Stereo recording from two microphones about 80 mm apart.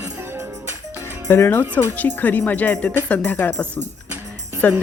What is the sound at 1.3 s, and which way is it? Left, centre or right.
Speech, left.